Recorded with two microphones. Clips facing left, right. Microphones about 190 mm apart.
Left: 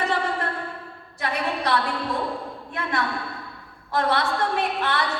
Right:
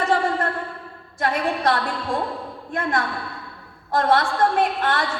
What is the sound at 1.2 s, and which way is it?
Speech, 50° right (ahead or behind).